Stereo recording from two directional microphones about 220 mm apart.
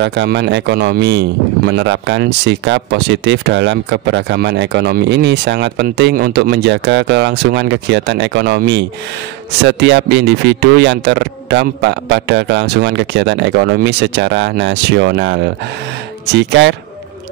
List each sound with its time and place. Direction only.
0.0 s speech: 50° right (ahead or behind)